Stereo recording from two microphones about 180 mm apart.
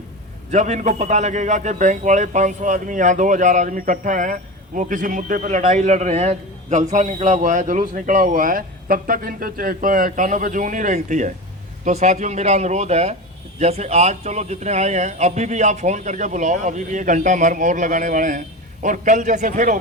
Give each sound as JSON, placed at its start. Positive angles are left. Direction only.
{"t": 0.5, "sound": "a man's voice", "side_deg": -40}